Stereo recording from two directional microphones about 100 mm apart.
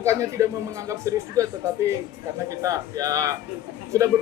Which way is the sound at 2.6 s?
35° right (ahead or behind).